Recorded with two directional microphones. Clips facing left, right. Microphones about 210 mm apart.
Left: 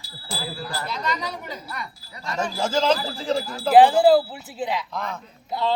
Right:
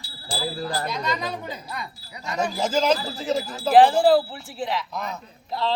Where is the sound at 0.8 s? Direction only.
15° right (ahead or behind).